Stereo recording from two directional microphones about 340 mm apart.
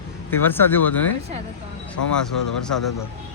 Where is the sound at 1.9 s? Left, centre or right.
Left.